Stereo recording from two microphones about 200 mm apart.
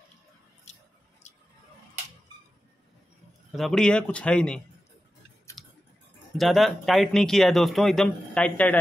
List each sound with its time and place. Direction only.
1.2 s a sound: 35° left (ahead or behind)
3.5 s a man's voice: centre (ahead or behind)
5.6 s tick-tock: centre (ahead or behind)
6.3 s a man's voice: centre (ahead or behind)